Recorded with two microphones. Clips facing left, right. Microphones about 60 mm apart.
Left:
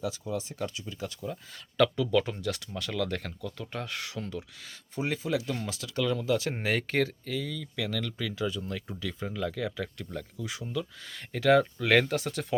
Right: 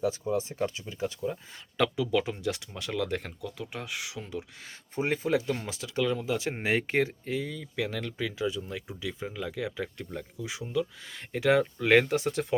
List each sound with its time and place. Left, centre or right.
0.0 s speech: right; by 4.4 s centre
4.5 s speech: right